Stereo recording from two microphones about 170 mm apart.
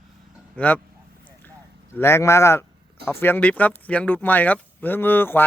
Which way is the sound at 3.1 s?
15° left (ahead or behind).